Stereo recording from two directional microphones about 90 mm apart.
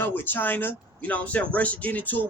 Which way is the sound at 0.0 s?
25° left (ahead or behind).